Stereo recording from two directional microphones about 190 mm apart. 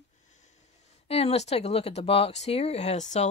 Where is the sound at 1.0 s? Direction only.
30° left (ahead or behind).